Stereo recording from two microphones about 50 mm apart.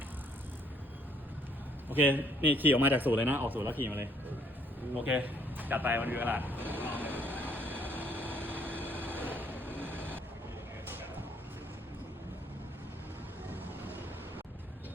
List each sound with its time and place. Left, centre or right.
1.9 s a man's voice: right
3.8 s a man's voice: right
5.0 s vehicle: right